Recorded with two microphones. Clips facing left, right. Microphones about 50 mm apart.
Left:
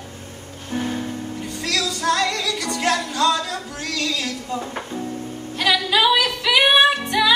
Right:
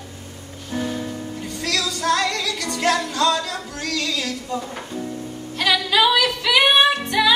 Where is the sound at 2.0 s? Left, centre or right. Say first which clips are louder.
Even; centre.